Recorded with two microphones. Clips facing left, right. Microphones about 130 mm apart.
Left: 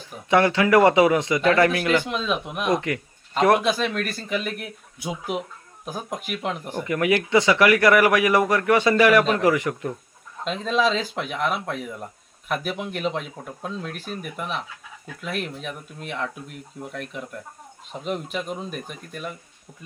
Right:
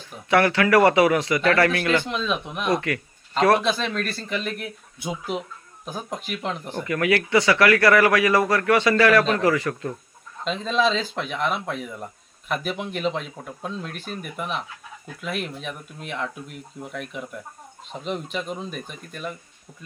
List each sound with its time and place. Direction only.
0.3 s speech: 20° left (ahead or behind)
2.7 s a man's voice: 20° left (ahead or behind)
10.4 s speech: 5° left (ahead or behind)